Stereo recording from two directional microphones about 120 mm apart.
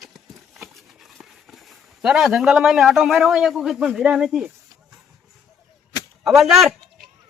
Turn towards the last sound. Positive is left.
turn(degrees=0)  # may be behind; listen again after turning